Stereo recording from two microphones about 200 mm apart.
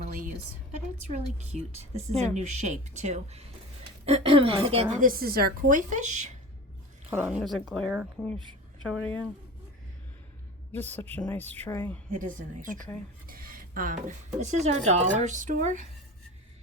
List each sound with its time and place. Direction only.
0.0 s a sound: 40° right (ahead or behind)
1.0 s a woman's voice: 35° right (ahead or behind)
5.0 s speech: 45° right (ahead or behind)
7.1 s speech: 5° right (ahead or behind)
10.7 s speech: 10° left (ahead or behind)
12.1 s speech: 40° right (ahead or behind)